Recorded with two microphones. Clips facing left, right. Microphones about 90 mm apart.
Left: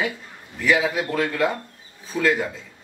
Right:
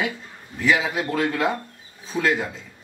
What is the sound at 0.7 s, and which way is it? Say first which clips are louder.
Speech: left 2 dB; 5° left (ahead or behind).